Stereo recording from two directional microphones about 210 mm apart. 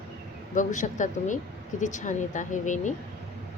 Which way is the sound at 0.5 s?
35° left (ahead or behind).